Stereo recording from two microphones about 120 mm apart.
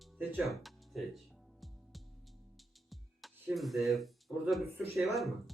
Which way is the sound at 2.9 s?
Centre (ahead or behind).